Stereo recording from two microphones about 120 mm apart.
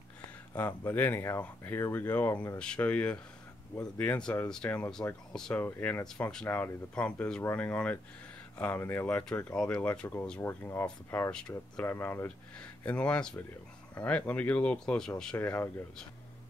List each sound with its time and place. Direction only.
0.6 s speech: 15° left (ahead or behind)
2.3 s speech: 35° left (ahead or behind)
2.6 s speech: 10° left (ahead or behind)